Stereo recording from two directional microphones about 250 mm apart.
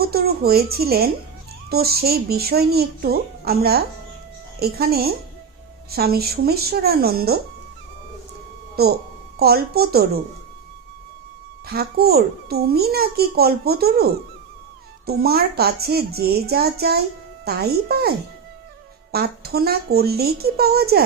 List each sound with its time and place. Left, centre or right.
0.0 s a child's voice: right
8.7 s a child's voice: right
11.6 s a child's voice: right
19.1 s a child's voice: right